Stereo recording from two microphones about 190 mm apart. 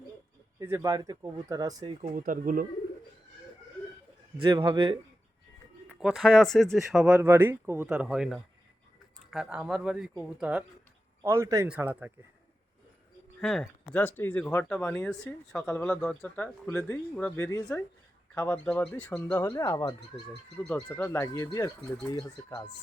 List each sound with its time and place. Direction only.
0.6 s speech: 15° right (ahead or behind)
2.1 s speech: 45° right (ahead or behind)
4.4 s speech: 20° right (ahead or behind)
5.9 s speech: 5° right (ahead or behind)
11.2 s speech: 15° right (ahead or behind)
13.4 s speech: 5° left (ahead or behind); by 20.0 s 20° left (ahead or behind)
20.6 s speech: 5° left (ahead or behind)